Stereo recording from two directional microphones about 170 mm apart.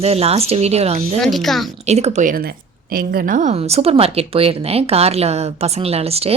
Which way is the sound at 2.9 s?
60° right (ahead or behind).